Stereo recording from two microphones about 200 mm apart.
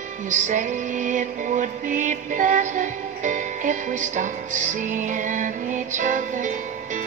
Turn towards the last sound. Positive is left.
turn(degrees=-40)  # may be behind; listen again after turning